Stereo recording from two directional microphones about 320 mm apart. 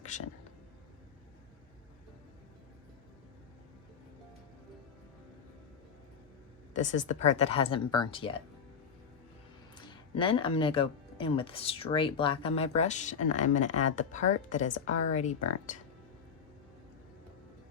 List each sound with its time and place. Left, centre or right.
6.7 s a woman's voice: left
9.7 s a woman's voice: centre